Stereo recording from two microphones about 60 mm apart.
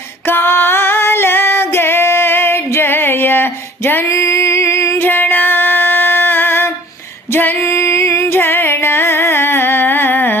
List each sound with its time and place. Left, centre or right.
0.3 s female singing: left
4.1 s music: left
5.0 s music: left